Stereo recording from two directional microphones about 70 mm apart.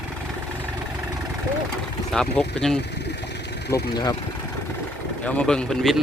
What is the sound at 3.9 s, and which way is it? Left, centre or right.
Speech, left.